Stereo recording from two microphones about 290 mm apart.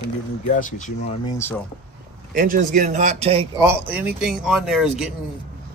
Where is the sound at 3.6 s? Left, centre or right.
Centre.